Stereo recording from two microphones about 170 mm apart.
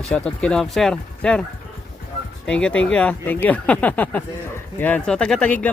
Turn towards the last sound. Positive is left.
turn(degrees=5)  # may be behind; listen again after turning